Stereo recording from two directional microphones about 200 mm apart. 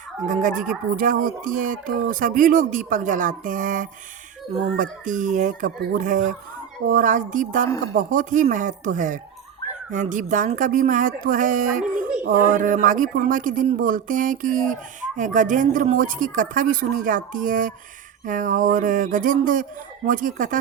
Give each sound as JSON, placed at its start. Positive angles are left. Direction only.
{"t": 0.3, "sound": "speech", "side_deg": -40}